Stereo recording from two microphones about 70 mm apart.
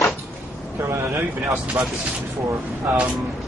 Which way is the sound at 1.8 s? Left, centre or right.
Right.